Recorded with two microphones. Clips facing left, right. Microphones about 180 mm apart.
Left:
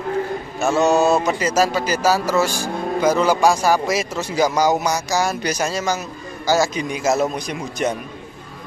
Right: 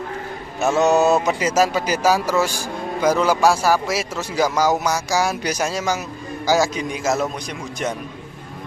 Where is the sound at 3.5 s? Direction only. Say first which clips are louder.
Left 1 dB; 5° right (ahead or behind).